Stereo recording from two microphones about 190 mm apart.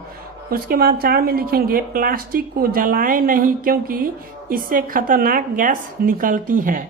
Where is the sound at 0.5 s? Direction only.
55° right (ahead or behind).